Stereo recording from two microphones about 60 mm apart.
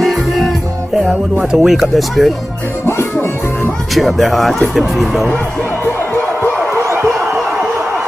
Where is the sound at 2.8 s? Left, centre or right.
Left.